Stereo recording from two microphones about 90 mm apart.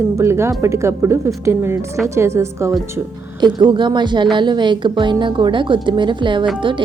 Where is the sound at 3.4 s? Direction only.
60° right (ahead or behind).